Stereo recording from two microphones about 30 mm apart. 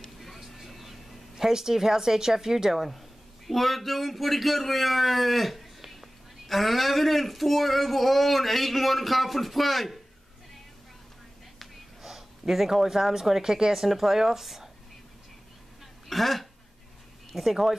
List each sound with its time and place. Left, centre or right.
0.4 s vehicle: centre
1.3 s speech: centre
3.4 s speech: centre
12.0 s speech: centre
16.1 s speech: centre